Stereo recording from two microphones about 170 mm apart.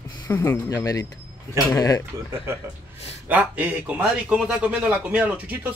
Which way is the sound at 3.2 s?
10° right (ahead or behind).